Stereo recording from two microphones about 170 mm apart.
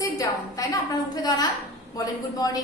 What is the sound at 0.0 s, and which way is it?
A woman's voice, 20° left (ahead or behind).